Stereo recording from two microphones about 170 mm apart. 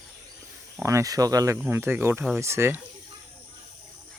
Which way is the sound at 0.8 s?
15° right (ahead or behind).